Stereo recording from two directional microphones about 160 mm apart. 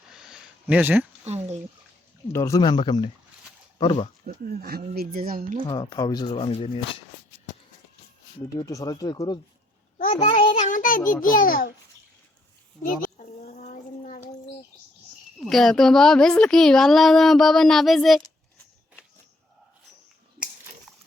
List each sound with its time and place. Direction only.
0.1 s a sound: 5° right (ahead or behind)
1.2 s a sound: 45° right (ahead or behind)
2.3 s speech: 20° left (ahead or behind)
4.3 s speech: 75° right (ahead or behind)
5.6 s speech: 25° left (ahead or behind)
8.5 s speech: 25° left (ahead or behind)
10.1 s a child's voice: 40° left (ahead or behind); by 11.7 s 60° left (ahead or behind)
12.8 s a sound: 55° left (ahead or behind)
15.4 s speech: centre (ahead or behind)